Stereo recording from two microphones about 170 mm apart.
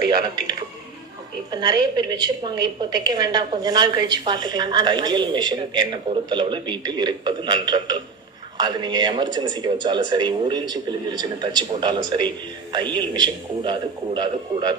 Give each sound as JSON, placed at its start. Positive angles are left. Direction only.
{"t": 1.5, "sound": "speech", "side_deg": -25}
{"t": 14.5, "sound": "speech", "side_deg": -40}